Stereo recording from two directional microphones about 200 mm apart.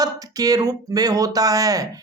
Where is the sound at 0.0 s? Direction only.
15° right (ahead or behind).